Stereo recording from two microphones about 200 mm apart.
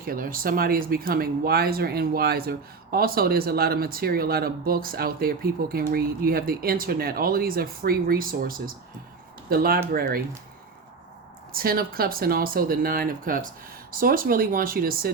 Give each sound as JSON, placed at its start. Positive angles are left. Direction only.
{"t": 0.0, "sound": "speech", "side_deg": -45}
{"t": 11.5, "sound": "speech", "side_deg": -45}